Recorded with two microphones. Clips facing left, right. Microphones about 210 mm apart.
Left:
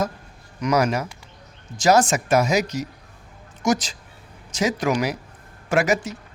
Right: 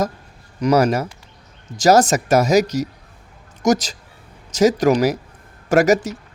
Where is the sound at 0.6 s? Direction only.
35° right (ahead or behind).